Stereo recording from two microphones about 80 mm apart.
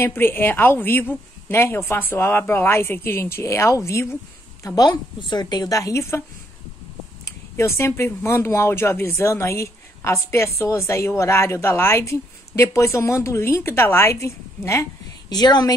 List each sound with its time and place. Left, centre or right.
0.0 s a woman's voice: left
4.6 s a woman's voice: left
7.2 s speech: left
15.2 s a woman's voice: left